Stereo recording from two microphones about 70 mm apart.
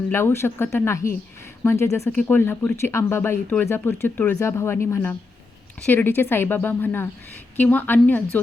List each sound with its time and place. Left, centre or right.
0.1 s speech: left
2.0 s a woman's voice: left